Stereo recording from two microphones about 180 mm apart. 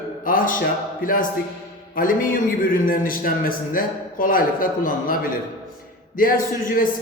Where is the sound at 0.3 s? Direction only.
50° left (ahead or behind).